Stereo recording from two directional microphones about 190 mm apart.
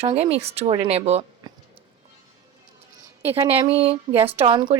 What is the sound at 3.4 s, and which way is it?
Speech, 30° right (ahead or behind).